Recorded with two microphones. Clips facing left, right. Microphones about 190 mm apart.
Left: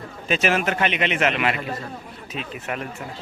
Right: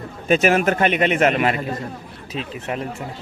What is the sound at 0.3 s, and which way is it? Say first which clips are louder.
A man's voice: right 5 dB; 45° right (ahead or behind).